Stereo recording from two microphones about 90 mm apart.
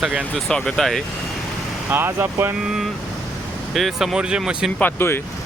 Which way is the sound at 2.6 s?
5° right (ahead or behind).